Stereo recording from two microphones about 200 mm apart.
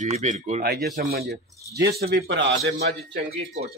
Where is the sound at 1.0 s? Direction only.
55° right (ahead or behind).